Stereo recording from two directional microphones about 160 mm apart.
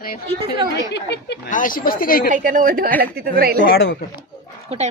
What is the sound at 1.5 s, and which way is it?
Speech, 55° left (ahead or behind).